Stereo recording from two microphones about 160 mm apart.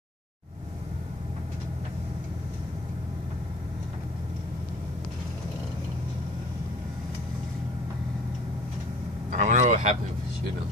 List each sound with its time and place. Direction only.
9.3 s vehicle: 50° right (ahead or behind)